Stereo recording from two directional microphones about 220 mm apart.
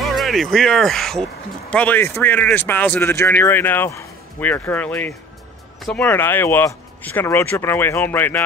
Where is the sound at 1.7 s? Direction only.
5° left (ahead or behind).